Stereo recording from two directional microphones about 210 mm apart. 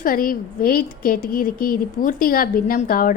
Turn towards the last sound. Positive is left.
turn(degrees=40)  # may be behind; listen again after turning